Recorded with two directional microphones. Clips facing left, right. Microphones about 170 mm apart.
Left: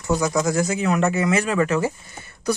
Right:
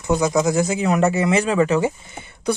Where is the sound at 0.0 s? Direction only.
20° right (ahead or behind).